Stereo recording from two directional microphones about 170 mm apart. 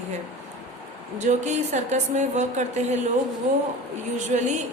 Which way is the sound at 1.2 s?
45° right (ahead or behind).